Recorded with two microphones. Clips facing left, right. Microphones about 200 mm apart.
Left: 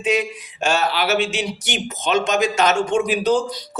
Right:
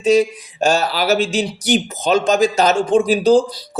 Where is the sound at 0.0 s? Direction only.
40° right (ahead or behind).